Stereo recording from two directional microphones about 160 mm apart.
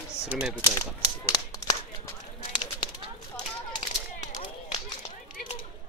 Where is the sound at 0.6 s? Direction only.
20° left (ahead or behind).